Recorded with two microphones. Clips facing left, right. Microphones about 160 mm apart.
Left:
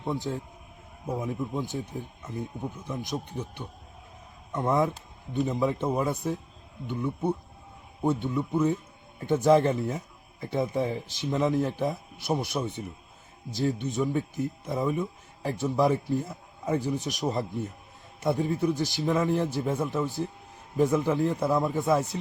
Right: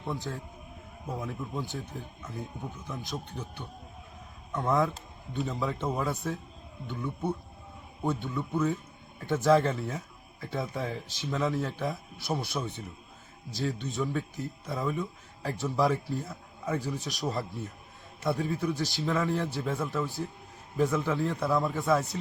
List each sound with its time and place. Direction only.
0.3 s a man's voice: 20° left (ahead or behind)